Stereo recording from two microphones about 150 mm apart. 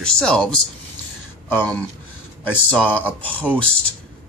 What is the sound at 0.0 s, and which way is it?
Speech, 5° left (ahead or behind).